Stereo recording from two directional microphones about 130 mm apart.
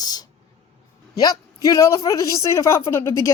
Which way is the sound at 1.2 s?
25° left (ahead or behind).